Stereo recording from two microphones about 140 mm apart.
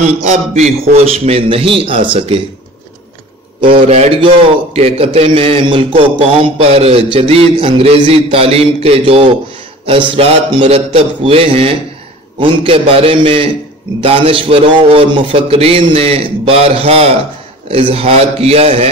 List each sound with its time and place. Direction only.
0.0 s a man's voice: 55° right (ahead or behind)
4.7 s a man's voice: 45° right (ahead or behind)